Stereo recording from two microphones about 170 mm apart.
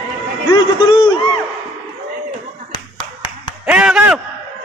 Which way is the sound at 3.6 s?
5° right (ahead or behind).